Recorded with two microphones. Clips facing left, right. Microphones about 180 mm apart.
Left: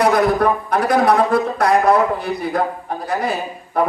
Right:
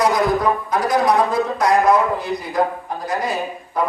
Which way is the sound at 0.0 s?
60° left (ahead or behind).